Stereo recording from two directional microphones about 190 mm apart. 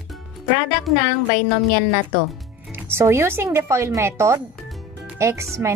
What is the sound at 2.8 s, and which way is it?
A woman's voice, 15° right (ahead or behind).